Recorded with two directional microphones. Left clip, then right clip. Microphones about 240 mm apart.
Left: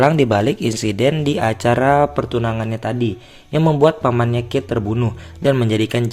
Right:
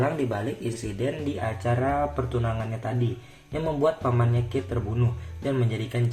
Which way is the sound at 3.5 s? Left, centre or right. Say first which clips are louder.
Left 10 dB; left.